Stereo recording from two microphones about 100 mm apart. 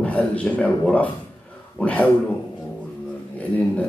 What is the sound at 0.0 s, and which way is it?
Speech, 10° left (ahead or behind).